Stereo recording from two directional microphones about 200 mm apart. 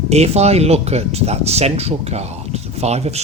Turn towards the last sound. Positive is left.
turn(degrees=-30)  # may be behind; listen again after turning